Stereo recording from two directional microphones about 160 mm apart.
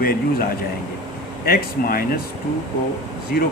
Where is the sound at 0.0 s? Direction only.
65° left (ahead or behind).